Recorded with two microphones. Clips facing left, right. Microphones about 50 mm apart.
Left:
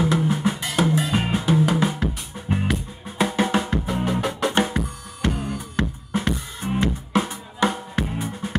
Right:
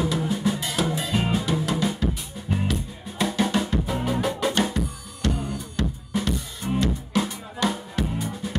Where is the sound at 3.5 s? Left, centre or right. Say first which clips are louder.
Left 2 dB; left.